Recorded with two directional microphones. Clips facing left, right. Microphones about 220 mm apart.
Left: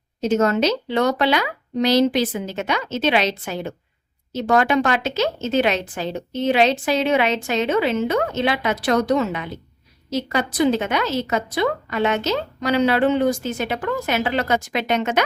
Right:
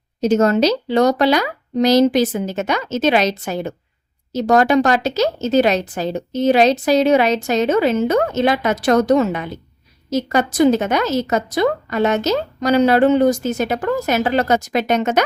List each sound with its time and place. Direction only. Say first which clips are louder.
0.2 s a woman's voice: right 4 dB; 40° right (ahead or behind)